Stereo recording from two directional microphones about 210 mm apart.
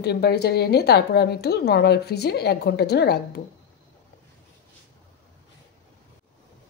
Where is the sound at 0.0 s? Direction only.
50° left (ahead or behind).